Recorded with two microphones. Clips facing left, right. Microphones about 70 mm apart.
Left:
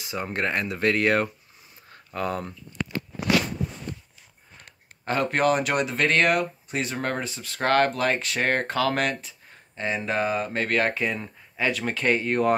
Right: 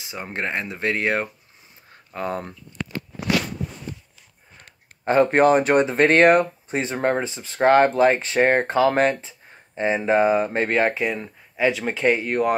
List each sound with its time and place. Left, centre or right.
0.0 s speech: right
5.0 s speech: right; by 12.5 s centre